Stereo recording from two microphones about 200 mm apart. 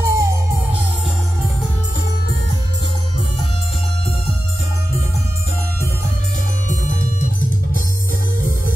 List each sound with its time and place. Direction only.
0.0 s music: 15° right (ahead or behind)